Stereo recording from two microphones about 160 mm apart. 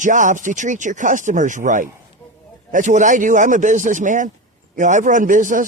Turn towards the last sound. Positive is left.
turn(degrees=-55)  # may be behind; listen again after turning